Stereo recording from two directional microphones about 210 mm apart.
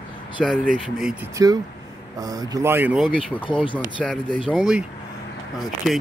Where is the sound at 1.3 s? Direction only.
15° right (ahead or behind).